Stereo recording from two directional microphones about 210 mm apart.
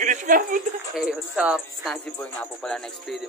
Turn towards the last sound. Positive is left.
turn(degrees=0)  # may be behind; listen again after turning